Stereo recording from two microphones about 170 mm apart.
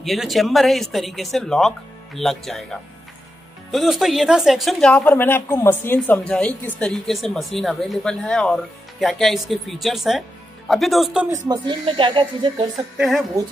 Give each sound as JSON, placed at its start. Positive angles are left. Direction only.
{"t": 0.0, "sound": "a woman's voice", "side_deg": 0}
{"t": 11.2, "sound": "speech", "side_deg": -20}
{"t": 12.9, "sound": "a woman's voice", "side_deg": -5}